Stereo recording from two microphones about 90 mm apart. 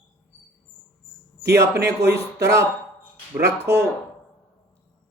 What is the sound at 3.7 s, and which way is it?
Speech, 35° right (ahead or behind).